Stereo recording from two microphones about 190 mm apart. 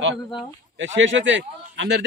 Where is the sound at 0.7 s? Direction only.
80° right.